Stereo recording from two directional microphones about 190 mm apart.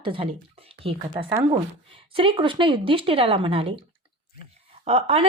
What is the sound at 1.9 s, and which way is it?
Speech, 30° right (ahead or behind).